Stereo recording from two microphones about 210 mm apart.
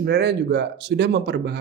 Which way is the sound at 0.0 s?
50° right (ahead or behind).